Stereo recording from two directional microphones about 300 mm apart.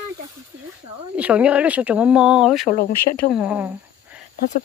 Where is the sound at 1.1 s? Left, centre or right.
Centre.